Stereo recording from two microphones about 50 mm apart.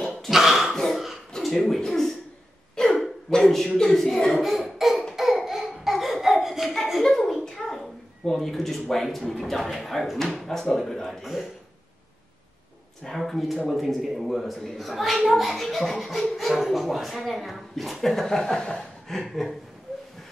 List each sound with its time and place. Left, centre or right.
0.3 s throat clearing: centre
0.7 s a sound: centre
1.4 s speech: centre
2.7 s hiccup: centre
3.3 s a sound: centre
5.1 s laughter: centre
7.0 s a sound: centre
8.3 s speech: centre
13.0 s speech: centre
19.0 s speech: centre